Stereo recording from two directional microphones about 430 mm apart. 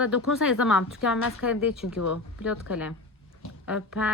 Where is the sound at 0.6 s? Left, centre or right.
Centre.